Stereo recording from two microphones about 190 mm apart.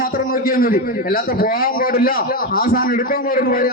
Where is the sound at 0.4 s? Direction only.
50° left (ahead or behind).